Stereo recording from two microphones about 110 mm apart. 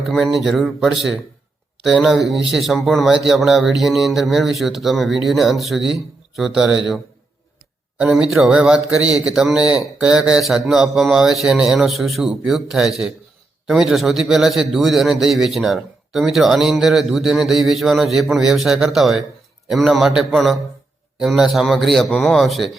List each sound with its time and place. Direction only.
0.0 s a man's voice: centre (ahead or behind)
8.1 s a man's voice: 5° right (ahead or behind)